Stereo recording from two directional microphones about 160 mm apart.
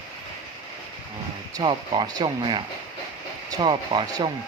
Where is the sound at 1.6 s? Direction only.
30° right (ahead or behind).